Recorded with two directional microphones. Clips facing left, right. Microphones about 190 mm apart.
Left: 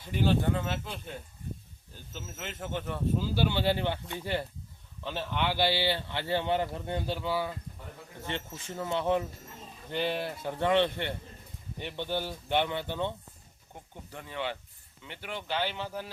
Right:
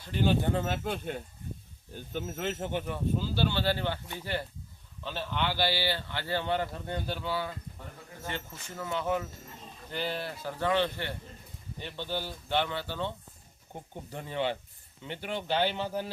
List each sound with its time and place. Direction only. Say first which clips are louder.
0.1 s speech: even; 5° left (ahead or behind)
0.5 s speech: right 3 dB; 45° right (ahead or behind)
2.4 s speech: right 6 dB; 35° right (ahead or behind)
2.7 s speech: right 2 dB; 5° right (ahead or behind)
3.2 s speech: left 2 dB; 10° left (ahead or behind)
14.1 s speech: right 4 dB; 25° right (ahead or behind)